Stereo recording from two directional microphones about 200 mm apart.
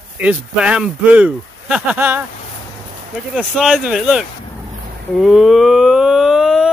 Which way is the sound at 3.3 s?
5° right (ahead or behind).